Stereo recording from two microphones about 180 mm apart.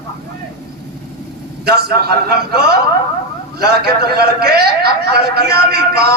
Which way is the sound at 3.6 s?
60° right (ahead or behind).